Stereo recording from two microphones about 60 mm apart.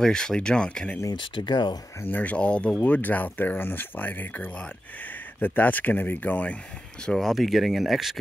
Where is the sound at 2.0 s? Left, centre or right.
Left.